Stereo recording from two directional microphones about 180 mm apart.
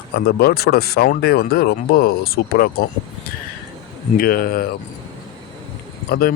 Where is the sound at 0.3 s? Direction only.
60° left (ahead or behind).